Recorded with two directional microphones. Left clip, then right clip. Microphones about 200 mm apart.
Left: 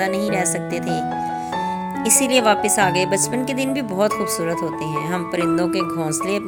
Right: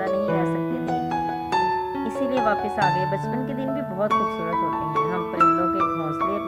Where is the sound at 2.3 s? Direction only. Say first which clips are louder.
Left 6 dB; 25° left (ahead or behind).